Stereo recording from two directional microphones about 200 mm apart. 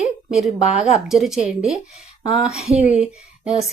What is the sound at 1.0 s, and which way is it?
Speech, centre (ahead or behind).